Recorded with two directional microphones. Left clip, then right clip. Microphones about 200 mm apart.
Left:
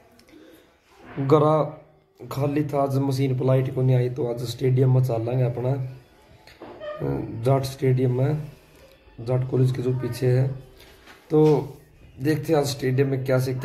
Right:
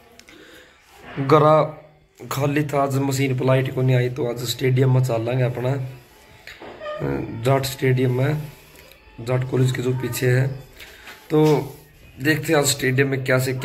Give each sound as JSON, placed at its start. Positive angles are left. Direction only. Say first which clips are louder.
{"t": 1.2, "sound": "a man's voice", "louder": "right 4 dB", "side_deg": 5}
{"t": 7.0, "sound": "a man's voice", "louder": "right 2 dB", "side_deg": 5}